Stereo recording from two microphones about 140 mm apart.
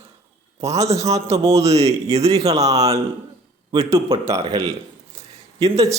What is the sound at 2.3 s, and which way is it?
Speech, 25° right (ahead or behind).